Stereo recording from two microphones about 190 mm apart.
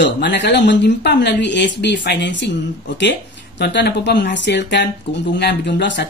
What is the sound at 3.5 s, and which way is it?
Speech, 60° left (ahead or behind).